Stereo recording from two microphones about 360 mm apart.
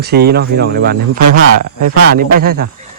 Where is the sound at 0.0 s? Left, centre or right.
Right.